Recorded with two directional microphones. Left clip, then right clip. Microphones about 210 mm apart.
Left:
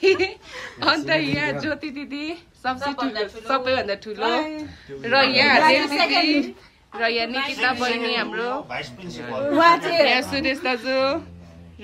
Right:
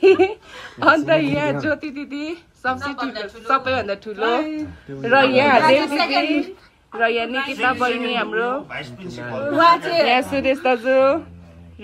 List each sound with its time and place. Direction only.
0.0 s a sound: centre (ahead or behind)
0.7 s a woman's voice: centre (ahead or behind)
5.8 s speech: 40° left (ahead or behind)
7.0 s a woman's voice: 5° left (ahead or behind)
8.6 s speech: 30° left (ahead or behind)
9.5 s a woman's voice: 50° left (ahead or behind)
10.1 s a woman's voice: centre (ahead or behind)